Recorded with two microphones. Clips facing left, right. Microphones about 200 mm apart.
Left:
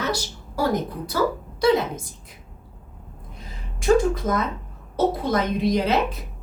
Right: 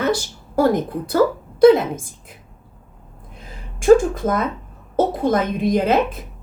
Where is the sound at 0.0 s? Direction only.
55° right (ahead or behind).